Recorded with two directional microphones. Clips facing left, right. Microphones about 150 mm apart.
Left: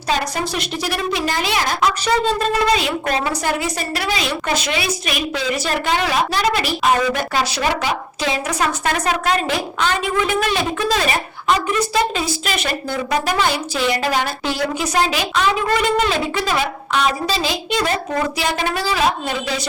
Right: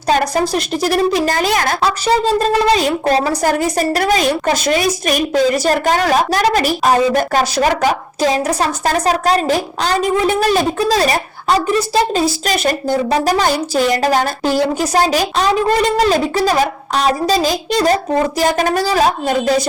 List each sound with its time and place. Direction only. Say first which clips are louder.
0.1 s a woman's voice: right 7 dB; 40° right (ahead or behind)
1.8 s a woman's voice: right 3 dB; 35° right (ahead or behind)